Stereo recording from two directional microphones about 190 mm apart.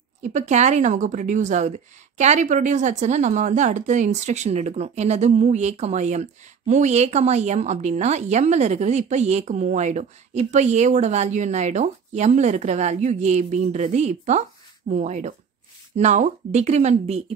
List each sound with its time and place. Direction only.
0.2 s a woman's voice: 40° right (ahead or behind)